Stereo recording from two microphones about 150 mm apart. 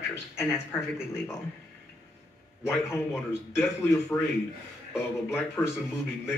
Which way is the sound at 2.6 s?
15° left (ahead or behind).